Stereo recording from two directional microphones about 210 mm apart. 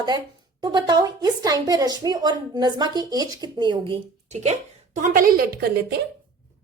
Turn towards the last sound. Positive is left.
turn(degrees=-50)  # may be behind; listen again after turning